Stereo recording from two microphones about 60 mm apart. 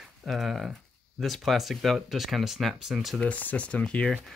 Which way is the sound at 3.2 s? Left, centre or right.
Left.